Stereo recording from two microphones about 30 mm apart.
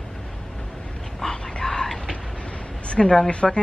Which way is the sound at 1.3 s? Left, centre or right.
Left.